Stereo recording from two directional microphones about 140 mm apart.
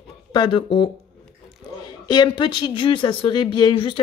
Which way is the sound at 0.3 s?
35° left (ahead or behind).